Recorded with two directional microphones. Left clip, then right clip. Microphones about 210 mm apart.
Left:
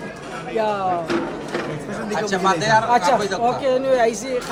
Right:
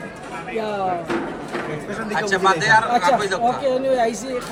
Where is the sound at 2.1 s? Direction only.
25° left (ahead or behind).